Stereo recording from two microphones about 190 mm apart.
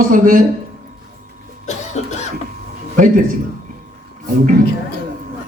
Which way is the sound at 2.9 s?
45° right (ahead or behind).